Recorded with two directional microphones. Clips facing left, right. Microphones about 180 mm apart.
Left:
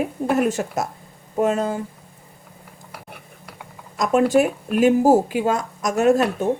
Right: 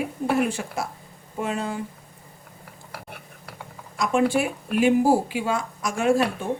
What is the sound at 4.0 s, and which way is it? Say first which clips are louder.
Speech: left 5 dB; 45° left (ahead or behind).